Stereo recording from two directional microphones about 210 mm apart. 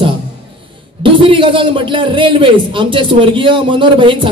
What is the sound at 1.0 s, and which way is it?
A man's voice, 25° right (ahead or behind).